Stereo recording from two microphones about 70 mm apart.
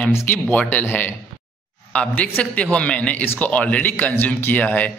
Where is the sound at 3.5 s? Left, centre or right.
Centre.